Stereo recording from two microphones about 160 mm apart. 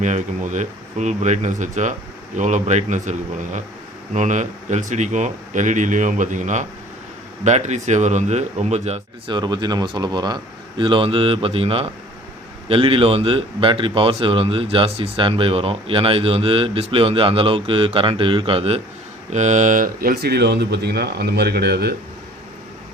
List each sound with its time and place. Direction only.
0.0 s speech: 50° right (ahead or behind)
9.3 s a man's voice: 25° right (ahead or behind)
19.3 s speech: 50° right (ahead or behind); by 21.9 s 90° right